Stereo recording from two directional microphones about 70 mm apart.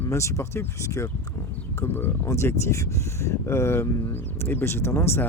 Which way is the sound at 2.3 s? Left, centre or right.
Left.